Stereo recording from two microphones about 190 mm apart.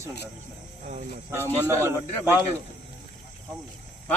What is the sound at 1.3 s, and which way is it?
Speech, 15° right (ahead or behind).